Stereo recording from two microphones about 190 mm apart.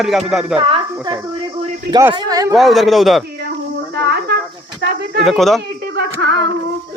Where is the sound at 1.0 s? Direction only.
25° right (ahead or behind).